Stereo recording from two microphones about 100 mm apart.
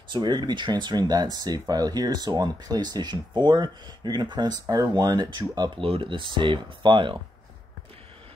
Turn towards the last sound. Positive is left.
turn(degrees=-55)  # may be behind; listen again after turning